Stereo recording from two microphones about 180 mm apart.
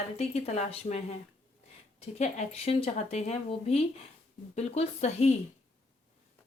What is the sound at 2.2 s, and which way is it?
Speech, 35° left (ahead or behind).